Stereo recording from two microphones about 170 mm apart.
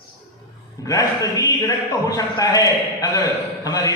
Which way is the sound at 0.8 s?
20° left (ahead or behind).